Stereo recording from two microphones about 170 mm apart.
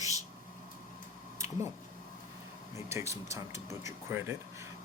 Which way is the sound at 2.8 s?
15° right (ahead or behind).